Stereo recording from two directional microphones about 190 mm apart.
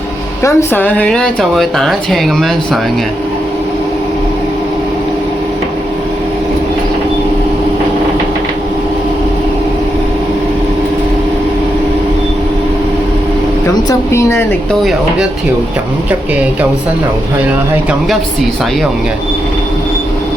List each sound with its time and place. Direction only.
0.4 s speech: 10° left (ahead or behind)
14.1 s speech: 15° left (ahead or behind)